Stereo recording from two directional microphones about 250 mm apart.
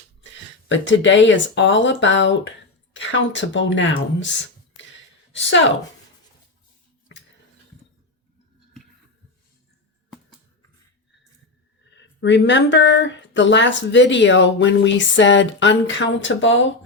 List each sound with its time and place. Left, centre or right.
0.7 s speech: left
5.3 s a woman's voice: left
11.9 s speech: left